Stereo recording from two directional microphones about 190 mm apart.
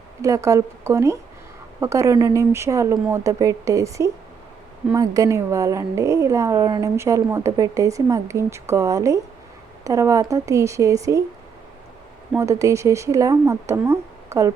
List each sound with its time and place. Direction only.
0.2 s a woman's voice: 15° right (ahead or behind)
12.3 s a woman's voice: 15° right (ahead or behind)